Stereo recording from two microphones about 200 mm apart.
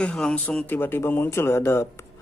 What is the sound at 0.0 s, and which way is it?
Speech, 5° left (ahead or behind).